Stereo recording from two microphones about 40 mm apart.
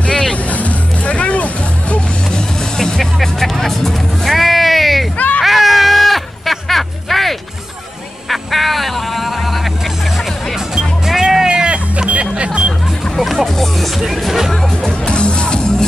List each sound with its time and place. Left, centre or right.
0.1 s music: centre
0.5 s music: left
3.0 s music: centre
5.1 s a sound: left
5.4 s a sound: centre
8.3 s fowl: centre
11.1 s music: centre
12.1 s vehicle: right
13.1 s music: centre
14.9 s music: left